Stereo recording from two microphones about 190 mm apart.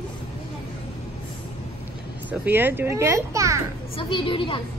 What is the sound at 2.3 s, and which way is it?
A child's voice, 10° right (ahead or behind).